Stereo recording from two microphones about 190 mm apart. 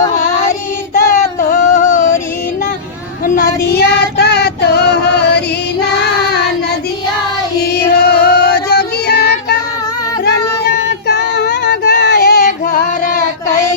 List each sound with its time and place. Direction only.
0.9 s child singing: 45° left (ahead or behind)
3.2 s child singing: 45° left (ahead or behind)
7.6 s music: 55° left (ahead or behind)
10.2 s child singing: 60° left (ahead or behind); by 13.2 s 45° left (ahead or behind)